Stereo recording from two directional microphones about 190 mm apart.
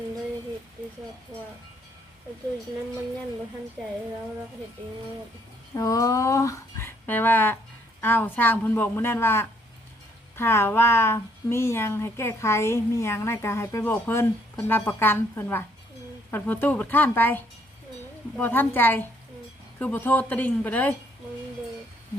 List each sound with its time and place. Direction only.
5.7 s speech: 15° left (ahead or behind)